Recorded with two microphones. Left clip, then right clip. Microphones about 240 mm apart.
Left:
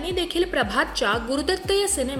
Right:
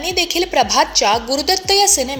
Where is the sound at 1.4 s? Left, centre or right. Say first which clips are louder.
Right 7 dB; right.